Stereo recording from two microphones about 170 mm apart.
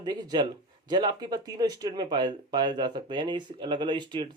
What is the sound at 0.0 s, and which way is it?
Speech, 25° right (ahead or behind).